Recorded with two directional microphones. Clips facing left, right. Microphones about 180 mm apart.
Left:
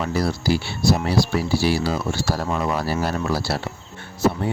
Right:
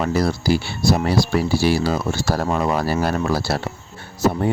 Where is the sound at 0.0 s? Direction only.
45° right (ahead or behind).